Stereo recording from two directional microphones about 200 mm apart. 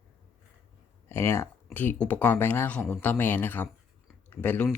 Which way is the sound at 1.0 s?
10° left (ahead or behind).